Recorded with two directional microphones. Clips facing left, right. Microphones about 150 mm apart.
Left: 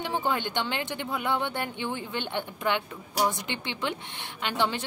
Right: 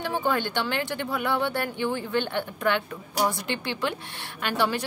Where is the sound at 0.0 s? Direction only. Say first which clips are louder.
Right 2 dB; 20° left (ahead or behind).